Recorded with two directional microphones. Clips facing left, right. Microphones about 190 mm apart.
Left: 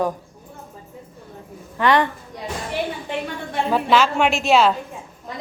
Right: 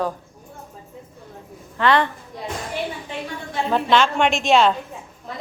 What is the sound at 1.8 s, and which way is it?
Speech, 15° left (ahead or behind).